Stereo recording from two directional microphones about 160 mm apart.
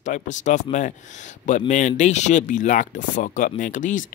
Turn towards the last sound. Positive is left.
turn(degrees=50)  # may be behind; listen again after turning